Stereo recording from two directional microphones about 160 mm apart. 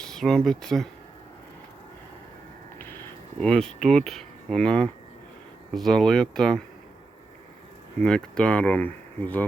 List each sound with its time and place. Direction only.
0.0 s speech: 5° left (ahead or behind)
2.7 s a sound: 15° left (ahead or behind)
3.4 s speech: 5° left (ahead or behind)
8.0 s speech: 5° left (ahead or behind)